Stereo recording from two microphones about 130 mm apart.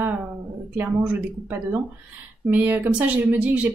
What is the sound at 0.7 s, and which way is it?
Speech, 10° right (ahead or behind).